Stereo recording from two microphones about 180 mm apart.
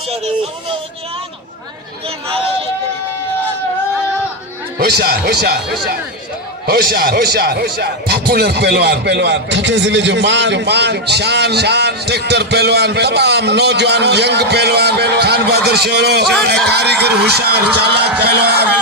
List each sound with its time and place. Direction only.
2.0 s speech: 30° right (ahead or behind)
4.8 s speech: 60° right (ahead or behind)
6.7 s speech: 60° right (ahead or behind)